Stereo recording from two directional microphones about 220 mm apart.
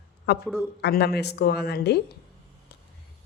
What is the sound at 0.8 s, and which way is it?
Speech, 45° left (ahead or behind).